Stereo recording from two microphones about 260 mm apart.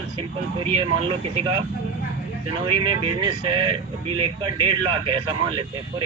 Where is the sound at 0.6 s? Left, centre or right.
Centre.